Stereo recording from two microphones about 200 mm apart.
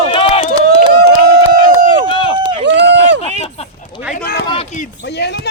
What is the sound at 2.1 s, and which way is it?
Run, 25° left (ahead or behind).